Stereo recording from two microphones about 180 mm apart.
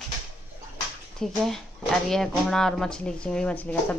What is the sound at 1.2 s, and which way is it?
Speech, centre (ahead or behind).